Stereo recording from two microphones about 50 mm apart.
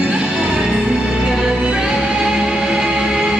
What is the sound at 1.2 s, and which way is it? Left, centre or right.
Music, centre.